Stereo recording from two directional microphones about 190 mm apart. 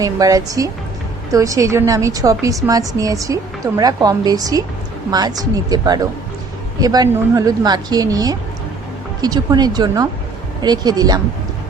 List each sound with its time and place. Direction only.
0.0 s a woman's voice: 20° right (ahead or behind)